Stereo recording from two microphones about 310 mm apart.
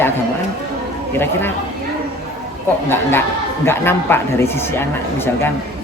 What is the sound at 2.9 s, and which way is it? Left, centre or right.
Speech, centre.